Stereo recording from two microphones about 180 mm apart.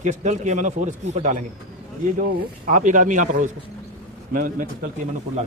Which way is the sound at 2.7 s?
45° right (ahead or behind).